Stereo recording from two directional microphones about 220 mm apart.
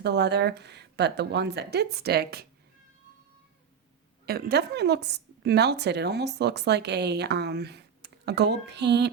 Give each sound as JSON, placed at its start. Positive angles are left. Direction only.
{"t": 0.0, "sound": "a woman's voice", "side_deg": -50}
{"t": 4.3, "sound": "a woman's voice", "side_deg": -45}